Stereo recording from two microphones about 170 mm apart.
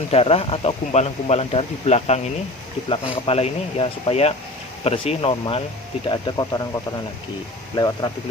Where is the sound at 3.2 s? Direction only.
35° left (ahead or behind).